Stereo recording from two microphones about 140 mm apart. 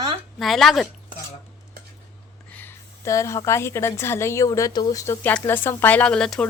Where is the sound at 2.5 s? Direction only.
15° left (ahead or behind).